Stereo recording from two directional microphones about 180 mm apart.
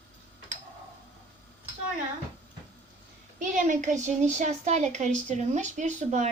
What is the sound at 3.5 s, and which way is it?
A woman's voice, 45° right (ahead or behind).